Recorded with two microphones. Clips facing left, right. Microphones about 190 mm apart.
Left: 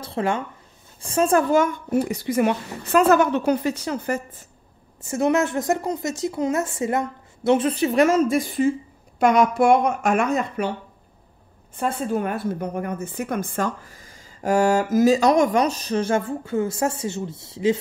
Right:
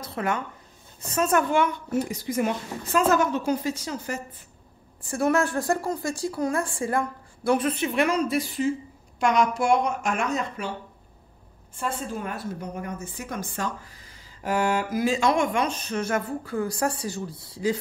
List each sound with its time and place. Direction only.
0.0 s a woman's voice: 30° left (ahead or behind); by 4.5 s 55° left (ahead or behind)
5.0 s a woman's voice: 20° left (ahead or behind); by 10.7 s 55° left (ahead or behind)
12.1 s a woman's voice: 60° left (ahead or behind); by 17.7 s 25° left (ahead or behind)